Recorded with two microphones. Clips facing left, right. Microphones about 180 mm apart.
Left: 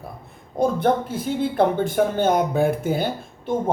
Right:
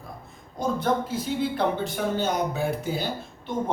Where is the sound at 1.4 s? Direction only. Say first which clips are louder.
Left 7 dB; 50° left (ahead or behind).